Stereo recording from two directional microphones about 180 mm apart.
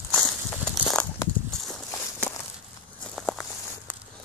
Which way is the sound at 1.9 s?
15° left (ahead or behind).